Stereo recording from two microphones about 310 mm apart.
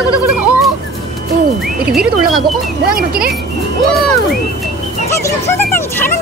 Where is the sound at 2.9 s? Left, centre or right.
Right.